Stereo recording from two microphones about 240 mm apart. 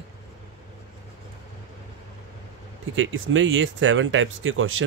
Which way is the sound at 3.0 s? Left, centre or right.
Right.